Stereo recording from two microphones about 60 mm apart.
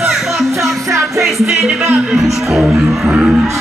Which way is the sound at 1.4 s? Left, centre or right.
Centre.